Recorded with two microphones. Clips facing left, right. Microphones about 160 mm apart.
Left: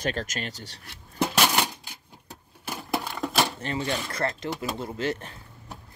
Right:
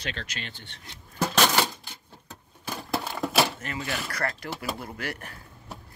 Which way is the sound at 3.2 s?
5° right (ahead or behind).